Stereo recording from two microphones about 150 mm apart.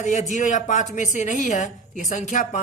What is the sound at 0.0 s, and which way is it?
A woman's voice, 50° left (ahead or behind).